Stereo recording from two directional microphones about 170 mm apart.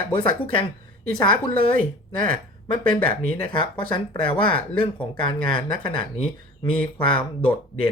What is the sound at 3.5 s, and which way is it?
Speech, 30° left (ahead or behind).